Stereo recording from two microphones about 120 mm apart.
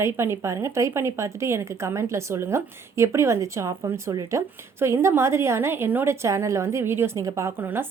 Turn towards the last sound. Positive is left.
turn(degrees=-20)  # may be behind; listen again after turning